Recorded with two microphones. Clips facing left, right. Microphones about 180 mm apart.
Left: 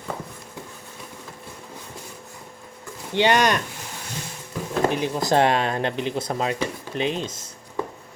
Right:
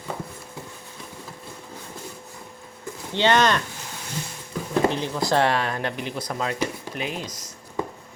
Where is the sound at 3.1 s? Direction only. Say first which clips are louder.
Left 1 dB; 15° left (ahead or behind).